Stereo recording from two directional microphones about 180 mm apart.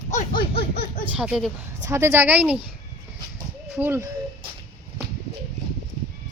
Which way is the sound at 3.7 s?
10° right (ahead or behind).